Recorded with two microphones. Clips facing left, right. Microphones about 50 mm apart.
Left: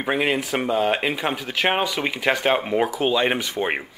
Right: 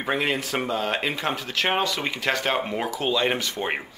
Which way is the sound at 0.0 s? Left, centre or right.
Centre.